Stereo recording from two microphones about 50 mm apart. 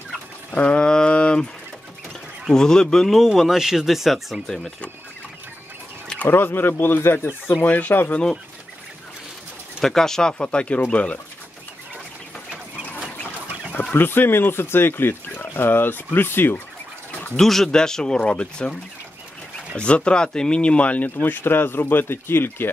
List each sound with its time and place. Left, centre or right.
0.5 s a sound: left
2.5 s speech: centre
3.2 s speech: centre
6.2 s speech: left
7.6 s speech: left
9.8 s speech: centre
10.3 s speech: left
13.9 s speech: left
17.4 s speech: centre; by 18.8 s left
19.8 s speech: left